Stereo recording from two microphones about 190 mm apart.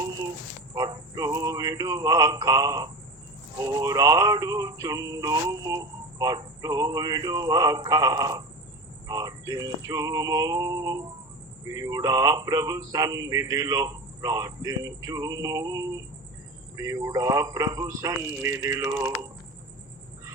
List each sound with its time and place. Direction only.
0.7 s male singing: 20° right (ahead or behind)
16.7 s speech: 15° right (ahead or behind)